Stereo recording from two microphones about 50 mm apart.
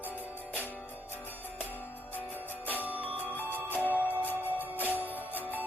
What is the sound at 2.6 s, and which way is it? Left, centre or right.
Music, right.